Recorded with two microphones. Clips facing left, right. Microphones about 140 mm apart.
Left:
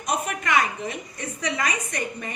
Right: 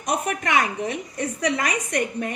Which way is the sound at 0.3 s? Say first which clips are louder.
Right 1 dB; 50° right (ahead or behind).